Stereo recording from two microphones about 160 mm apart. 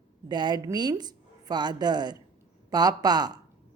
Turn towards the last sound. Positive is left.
turn(degrees=-25)  # may be behind; listen again after turning